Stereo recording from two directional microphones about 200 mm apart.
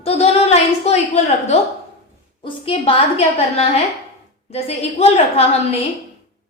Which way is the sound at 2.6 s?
30° left (ahead or behind).